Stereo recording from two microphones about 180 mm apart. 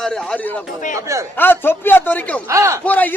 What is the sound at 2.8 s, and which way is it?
Speech, 10° left (ahead or behind).